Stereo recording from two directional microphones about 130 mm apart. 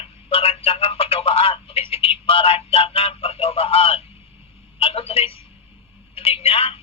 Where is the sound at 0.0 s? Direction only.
45° left (ahead or behind).